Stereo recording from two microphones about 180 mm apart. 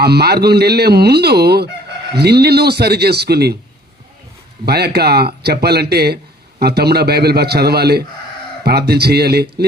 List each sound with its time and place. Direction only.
0.0 s fowl: 60° right (ahead or behind)
4.6 s fowl: 60° right (ahead or behind)